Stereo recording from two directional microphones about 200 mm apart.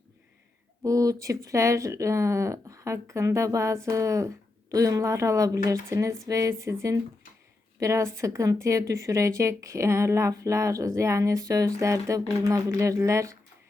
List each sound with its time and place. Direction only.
0.8 s a woman's voice: 15° right (ahead or behind)